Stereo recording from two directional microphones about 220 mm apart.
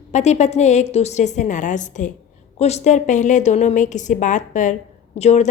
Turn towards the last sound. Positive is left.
turn(degrees=30)  # may be behind; listen again after turning